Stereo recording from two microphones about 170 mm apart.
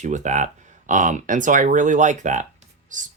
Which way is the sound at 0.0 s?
45° right (ahead or behind).